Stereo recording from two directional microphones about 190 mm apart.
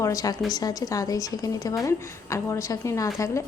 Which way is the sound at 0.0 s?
20° left (ahead or behind).